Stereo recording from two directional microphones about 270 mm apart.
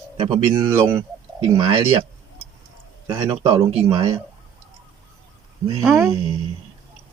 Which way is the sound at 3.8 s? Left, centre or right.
Centre.